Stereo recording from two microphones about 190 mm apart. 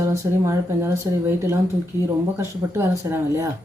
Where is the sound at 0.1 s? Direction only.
15° right (ahead or behind).